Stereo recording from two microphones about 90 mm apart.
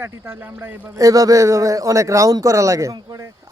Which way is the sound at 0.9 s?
40° right (ahead or behind).